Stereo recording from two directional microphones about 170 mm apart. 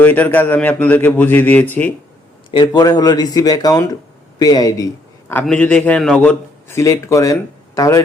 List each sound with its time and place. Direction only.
0.0 s a man's voice: 10° left (ahead or behind)
2.5 s speech: 25° left (ahead or behind)
5.3 s a man's voice: 10° left (ahead or behind)